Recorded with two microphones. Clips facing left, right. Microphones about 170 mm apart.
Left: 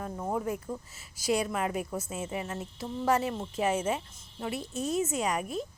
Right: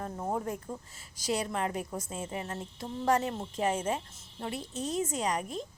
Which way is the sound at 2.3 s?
35° right (ahead or behind).